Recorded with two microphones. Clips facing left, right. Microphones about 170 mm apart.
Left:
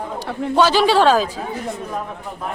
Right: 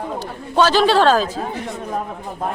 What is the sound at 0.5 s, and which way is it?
Speech, 10° left (ahead or behind).